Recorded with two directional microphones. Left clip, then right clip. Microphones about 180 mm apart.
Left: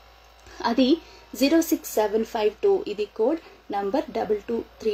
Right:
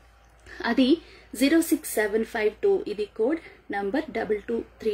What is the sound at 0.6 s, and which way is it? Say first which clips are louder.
A woman's voice: left 1 dB; 15° right (ahead or behind).